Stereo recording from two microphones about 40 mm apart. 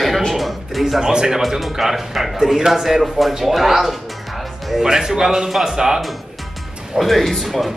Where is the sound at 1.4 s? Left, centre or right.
Centre.